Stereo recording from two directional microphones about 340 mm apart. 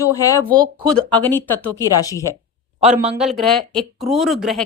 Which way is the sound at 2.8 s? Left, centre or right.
Centre.